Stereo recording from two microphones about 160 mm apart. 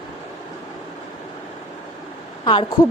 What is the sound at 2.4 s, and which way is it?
Speech, 30° left (ahead or behind).